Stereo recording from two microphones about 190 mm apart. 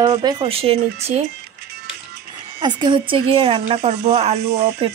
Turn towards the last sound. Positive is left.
turn(degrees=-30)  # may be behind; listen again after turning